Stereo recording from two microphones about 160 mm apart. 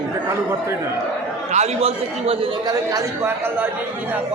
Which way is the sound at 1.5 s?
40° right (ahead or behind).